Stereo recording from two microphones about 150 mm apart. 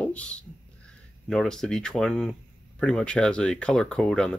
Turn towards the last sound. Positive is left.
turn(degrees=5)  # may be behind; listen again after turning